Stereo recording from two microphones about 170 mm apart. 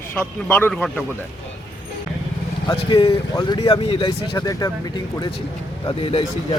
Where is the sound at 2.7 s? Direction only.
25° left (ahead or behind).